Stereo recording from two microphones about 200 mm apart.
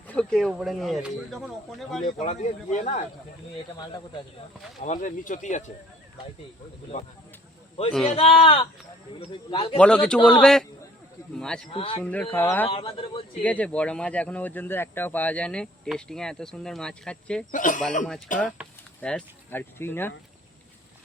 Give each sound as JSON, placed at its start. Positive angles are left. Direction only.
{"t": 0.1, "sound": "speech", "side_deg": 5}
{"t": 2.0, "sound": "speech", "side_deg": 35}
{"t": 3.8, "sound": "speech", "side_deg": 20}
{"t": 4.8, "sound": "speech", "side_deg": 40}
{"t": 6.9, "sound": "speech", "side_deg": 35}
{"t": 8.1, "sound": "speech", "side_deg": 30}
{"t": 9.7, "sound": "speech", "side_deg": 5}
{"t": 11.7, "sound": "speech", "side_deg": 25}
{"t": 11.9, "sound": "speech", "side_deg": 5}
{"t": 12.6, "sound": "speech", "side_deg": 25}
{"t": 13.4, "sound": "speech", "side_deg": 5}
{"t": 17.5, "sound": "speech", "side_deg": 40}
{"t": 18.3, "sound": "speech", "side_deg": 0}